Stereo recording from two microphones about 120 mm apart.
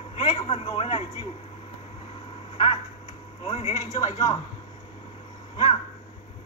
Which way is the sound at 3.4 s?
55° left (ahead or behind).